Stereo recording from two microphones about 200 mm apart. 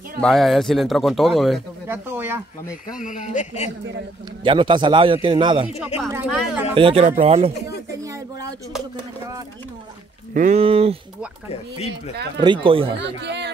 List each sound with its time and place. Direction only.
0.2 s speech: centre (ahead or behind)
1.9 s a sound: 10° right (ahead or behind)
3.0 s speech: 40° left (ahead or behind)
4.4 s a man's voice: 25° right (ahead or behind)
5.9 s a woman's voice: 15° right (ahead or behind)
6.2 s speech: centre (ahead or behind)
6.7 s a man's voice: 25° right (ahead or behind)
8.0 s a sound: 15° right (ahead or behind)
10.3 s a man's voice: 35° right (ahead or behind)
12.6 s a man's voice: 25° right (ahead or behind)
13.0 s speech: 60° right (ahead or behind)